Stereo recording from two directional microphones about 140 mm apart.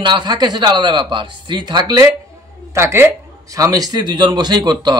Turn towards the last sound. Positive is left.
turn(degrees=-30)  # may be behind; listen again after turning